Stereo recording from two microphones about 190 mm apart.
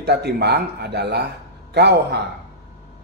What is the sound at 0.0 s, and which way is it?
A man's voice, 60° right (ahead or behind).